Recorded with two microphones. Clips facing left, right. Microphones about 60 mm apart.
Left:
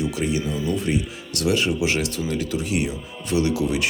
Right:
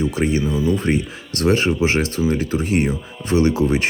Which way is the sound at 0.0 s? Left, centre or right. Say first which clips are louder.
Right 4 dB; right.